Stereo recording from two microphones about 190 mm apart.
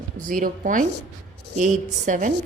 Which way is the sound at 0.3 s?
45° right (ahead or behind).